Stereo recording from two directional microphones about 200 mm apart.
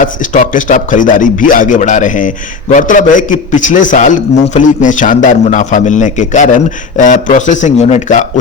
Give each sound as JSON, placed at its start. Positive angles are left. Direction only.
{"t": 0.0, "sound": "a man's voice", "side_deg": 40}